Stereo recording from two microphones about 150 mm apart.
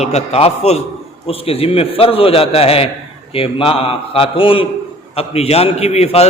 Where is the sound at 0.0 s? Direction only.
45° left (ahead or behind).